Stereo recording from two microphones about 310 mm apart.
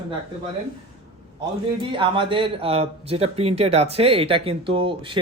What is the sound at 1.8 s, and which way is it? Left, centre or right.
Speech, centre.